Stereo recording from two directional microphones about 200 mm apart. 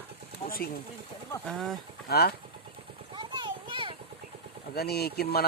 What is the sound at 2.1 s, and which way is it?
Speech, 50° left (ahead or behind).